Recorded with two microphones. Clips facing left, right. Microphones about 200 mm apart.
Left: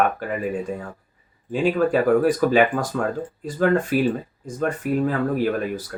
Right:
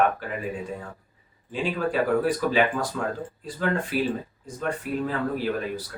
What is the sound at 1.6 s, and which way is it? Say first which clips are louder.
Speech: left 6 dB; 45° left (ahead or behind).